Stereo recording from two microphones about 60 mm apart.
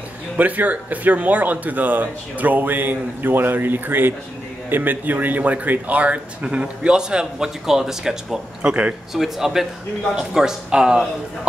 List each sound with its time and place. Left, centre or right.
0.4 s speech: right; by 11.0 s centre